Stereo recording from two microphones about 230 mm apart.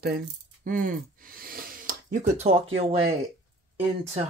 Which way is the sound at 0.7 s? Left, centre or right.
Right.